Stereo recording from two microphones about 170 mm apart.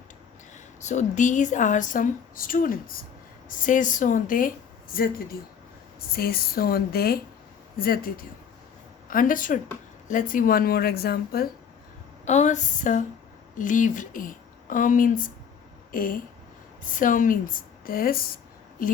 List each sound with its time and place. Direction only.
0.5 s a woman's voice: 45° left (ahead or behind); by 11.5 s 65° left (ahead or behind)
12.2 s a woman's voice: 45° left (ahead or behind)